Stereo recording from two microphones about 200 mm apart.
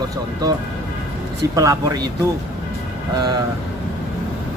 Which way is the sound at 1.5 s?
15° right (ahead or behind).